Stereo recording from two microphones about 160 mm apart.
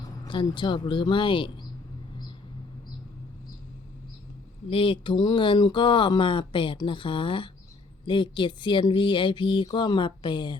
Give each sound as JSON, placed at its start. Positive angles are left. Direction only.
{"t": 0.3, "sound": "speech", "side_deg": 30}
{"t": 4.7, "sound": "speech", "side_deg": 35}